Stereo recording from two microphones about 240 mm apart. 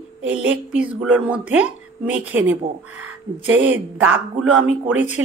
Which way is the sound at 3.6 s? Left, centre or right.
Centre.